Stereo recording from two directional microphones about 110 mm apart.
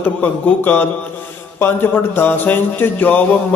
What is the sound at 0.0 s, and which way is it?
Speech, 15° left (ahead or behind).